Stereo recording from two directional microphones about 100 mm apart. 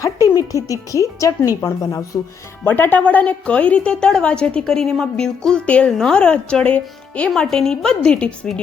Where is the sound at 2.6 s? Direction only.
20° left (ahead or behind).